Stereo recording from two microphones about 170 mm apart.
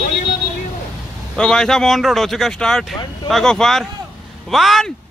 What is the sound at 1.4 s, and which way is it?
Speech, 5° left (ahead or behind).